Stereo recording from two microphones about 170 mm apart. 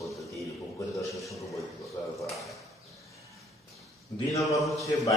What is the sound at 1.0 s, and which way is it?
Speech, 20° left (ahead or behind).